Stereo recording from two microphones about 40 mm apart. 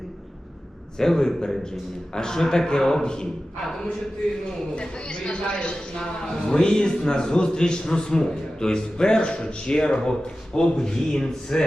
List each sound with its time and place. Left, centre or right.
0.9 s a man's voice: centre
4.7 s a man's voice: left